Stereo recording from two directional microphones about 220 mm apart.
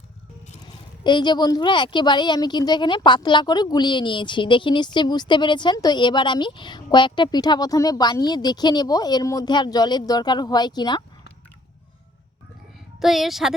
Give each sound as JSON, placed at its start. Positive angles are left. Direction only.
{"t": 0.6, "sound": "speech", "side_deg": 20}
{"t": 13.0, "sound": "a woman's voice", "side_deg": 0}